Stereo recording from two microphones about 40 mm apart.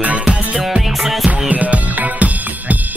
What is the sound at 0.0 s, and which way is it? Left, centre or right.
Music, right.